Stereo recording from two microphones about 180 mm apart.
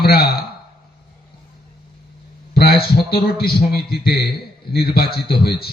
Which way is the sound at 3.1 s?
60° left (ahead or behind).